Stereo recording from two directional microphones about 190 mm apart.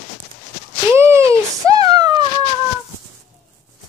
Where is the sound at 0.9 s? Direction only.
15° right (ahead or behind).